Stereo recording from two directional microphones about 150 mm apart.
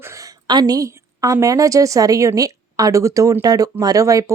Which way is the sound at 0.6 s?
25° right (ahead or behind).